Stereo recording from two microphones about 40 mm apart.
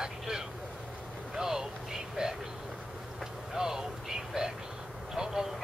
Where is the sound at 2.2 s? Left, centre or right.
Centre.